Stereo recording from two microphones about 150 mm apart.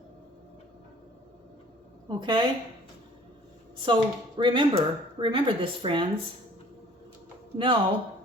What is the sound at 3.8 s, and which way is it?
Speech, 30° right (ahead or behind).